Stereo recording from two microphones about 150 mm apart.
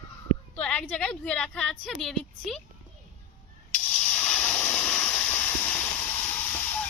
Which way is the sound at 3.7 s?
10° left (ahead or behind).